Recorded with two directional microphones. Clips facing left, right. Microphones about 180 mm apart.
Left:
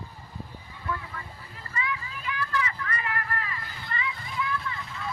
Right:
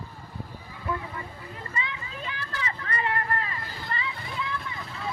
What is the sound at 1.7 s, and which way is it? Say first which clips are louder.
Vehicle: left 3 dB; 25° right (ahead or behind).